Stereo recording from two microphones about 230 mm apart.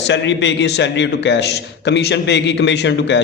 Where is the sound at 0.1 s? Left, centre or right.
Left.